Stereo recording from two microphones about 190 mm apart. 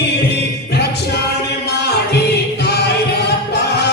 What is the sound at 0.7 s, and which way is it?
Music, 60° left (ahead or behind).